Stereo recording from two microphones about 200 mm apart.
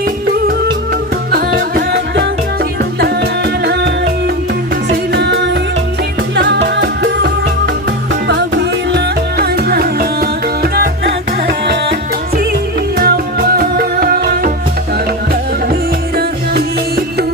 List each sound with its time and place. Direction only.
1.3 s music: 50° right (ahead or behind)
5.1 s music: 55° right (ahead or behind)
8.9 s music: 55° right (ahead or behind)
13.0 s music: 50° right (ahead or behind)